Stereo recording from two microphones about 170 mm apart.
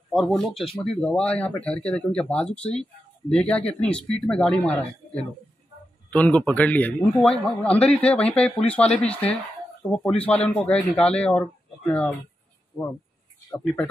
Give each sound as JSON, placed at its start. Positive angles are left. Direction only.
{"t": 0.1, "sound": "speech", "side_deg": 0}
{"t": 12.7, "sound": "speech", "side_deg": 20}